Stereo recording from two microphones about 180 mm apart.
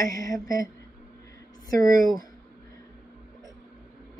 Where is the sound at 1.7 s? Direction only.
20° left (ahead or behind).